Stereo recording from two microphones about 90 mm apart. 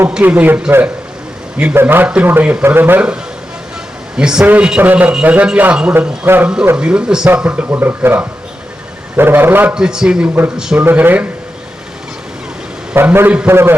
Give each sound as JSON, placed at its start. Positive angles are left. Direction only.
{"t": 0.2, "sound": "speech", "side_deg": -20}
{"t": 4.2, "sound": "a man's voice", "side_deg": -10}
{"t": 6.7, "sound": "a man's voice", "side_deg": -10}
{"t": 9.7, "sound": "a man's voice", "side_deg": -10}
{"t": 10.8, "sound": "speech", "side_deg": -20}
{"t": 12.9, "sound": "a man's voice", "side_deg": -20}